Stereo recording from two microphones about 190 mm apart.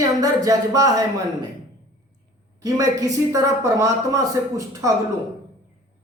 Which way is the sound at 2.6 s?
20° right (ahead or behind).